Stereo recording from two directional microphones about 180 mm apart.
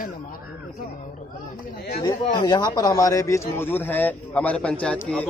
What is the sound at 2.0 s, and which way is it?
Speech, 25° left (ahead or behind).